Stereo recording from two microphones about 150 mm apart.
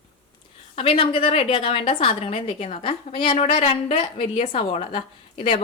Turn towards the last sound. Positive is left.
turn(degrees=40)  # may be behind; listen again after turning